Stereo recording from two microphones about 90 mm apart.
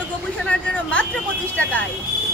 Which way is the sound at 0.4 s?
15° left (ahead or behind).